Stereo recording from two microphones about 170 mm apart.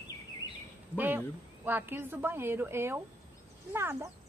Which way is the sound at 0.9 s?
10° right (ahead or behind).